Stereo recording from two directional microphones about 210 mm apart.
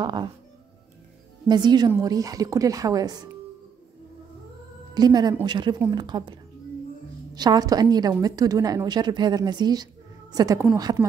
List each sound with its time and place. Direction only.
0.0 s a woman's voice: 20° right (ahead or behind)
1.5 s speech: 20° right (ahead or behind)
4.9 s a woman's voice: 20° right (ahead or behind)